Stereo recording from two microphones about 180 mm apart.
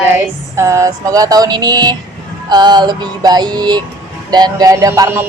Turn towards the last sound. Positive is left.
turn(degrees=-15)  # may be behind; listen again after turning